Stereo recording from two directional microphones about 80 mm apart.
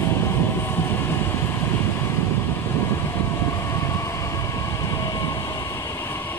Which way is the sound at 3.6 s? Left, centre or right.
Left.